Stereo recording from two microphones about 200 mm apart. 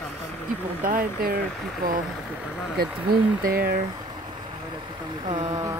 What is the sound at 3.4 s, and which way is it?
Speech, 50° right (ahead or behind).